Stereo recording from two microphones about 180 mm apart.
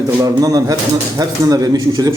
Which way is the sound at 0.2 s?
20° right (ahead or behind).